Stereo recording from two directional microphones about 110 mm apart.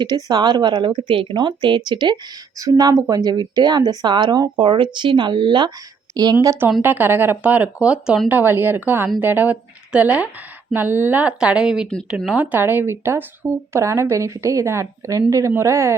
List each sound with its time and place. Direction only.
0.0 s speech: 40° right (ahead or behind)
2.6 s a woman's voice: 30° right (ahead or behind)
6.4 s speech: 25° right (ahead or behind)